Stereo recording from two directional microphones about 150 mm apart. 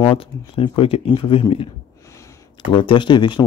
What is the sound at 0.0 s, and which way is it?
Speech, 35° left (ahead or behind).